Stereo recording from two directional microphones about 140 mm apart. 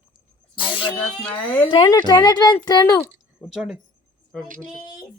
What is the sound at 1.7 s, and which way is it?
A woman's voice, 30° left (ahead or behind).